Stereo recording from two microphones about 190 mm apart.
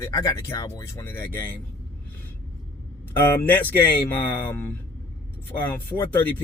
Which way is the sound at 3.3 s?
10° left (ahead or behind).